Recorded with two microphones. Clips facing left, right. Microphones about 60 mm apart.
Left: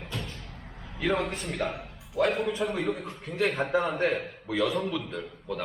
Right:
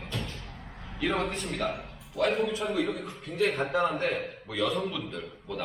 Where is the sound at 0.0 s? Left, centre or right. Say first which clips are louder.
Right 1 dB; centre.